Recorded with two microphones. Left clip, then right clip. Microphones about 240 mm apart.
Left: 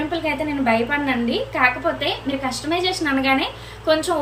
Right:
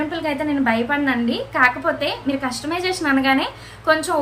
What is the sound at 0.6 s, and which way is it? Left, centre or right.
A woman's voice, centre.